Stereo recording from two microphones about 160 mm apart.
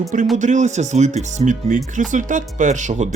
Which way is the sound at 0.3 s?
50° right (ahead or behind).